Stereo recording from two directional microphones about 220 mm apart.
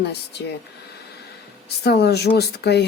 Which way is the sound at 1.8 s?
50° left (ahead or behind).